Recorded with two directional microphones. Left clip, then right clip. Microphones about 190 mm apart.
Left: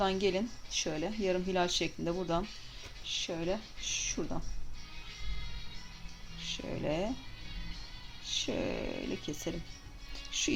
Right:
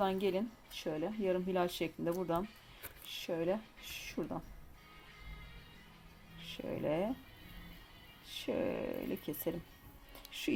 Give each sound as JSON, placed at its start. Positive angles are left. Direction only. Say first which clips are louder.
{"t": 0.0, "sound": "speech", "louder": "left 3 dB", "side_deg": -20}
{"t": 6.5, "sound": "speech", "louder": "left 1 dB", "side_deg": -25}
{"t": 8.3, "sound": "speech", "louder": "left 3 dB", "side_deg": -25}